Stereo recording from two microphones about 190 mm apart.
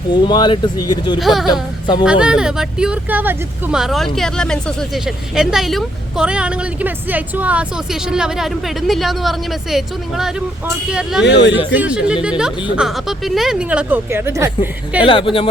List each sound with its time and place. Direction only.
0.1 s speech: 25° left (ahead or behind)
1.2 s speech: centre (ahead or behind)
11.3 s speech: 60° left (ahead or behind)
11.7 s speech: 5° right (ahead or behind)
15.0 s speech: 25° left (ahead or behind)